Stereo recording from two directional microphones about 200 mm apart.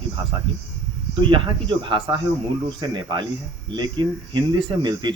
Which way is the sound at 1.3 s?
25° right (ahead or behind).